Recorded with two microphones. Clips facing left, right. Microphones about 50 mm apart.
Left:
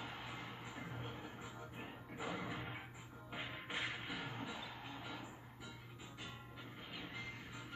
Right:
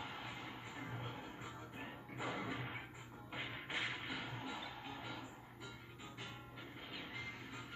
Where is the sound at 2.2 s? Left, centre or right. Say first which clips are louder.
Right 1 dB; centre.